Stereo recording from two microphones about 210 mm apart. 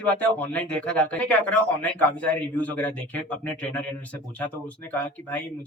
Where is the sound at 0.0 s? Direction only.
5° left (ahead or behind).